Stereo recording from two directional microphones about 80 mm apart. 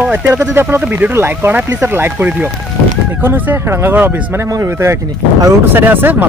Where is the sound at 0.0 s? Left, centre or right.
Right.